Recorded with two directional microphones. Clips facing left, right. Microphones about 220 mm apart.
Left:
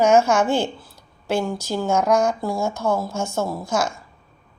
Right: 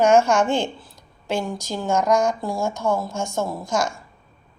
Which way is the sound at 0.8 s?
5° left (ahead or behind).